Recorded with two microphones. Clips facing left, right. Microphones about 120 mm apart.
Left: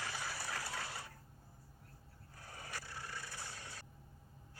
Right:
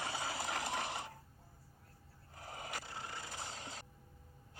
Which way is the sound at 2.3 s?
20° right (ahead or behind).